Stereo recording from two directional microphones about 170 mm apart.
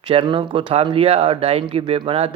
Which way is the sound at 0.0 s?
30° right (ahead or behind).